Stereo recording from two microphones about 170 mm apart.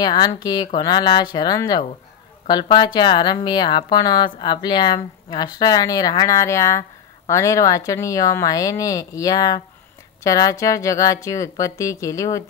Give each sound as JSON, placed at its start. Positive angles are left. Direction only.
{"t": 0.0, "sound": "a woman's voice", "side_deg": 25}